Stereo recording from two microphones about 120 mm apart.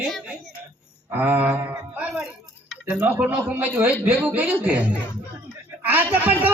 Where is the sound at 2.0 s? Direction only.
10° right (ahead or behind).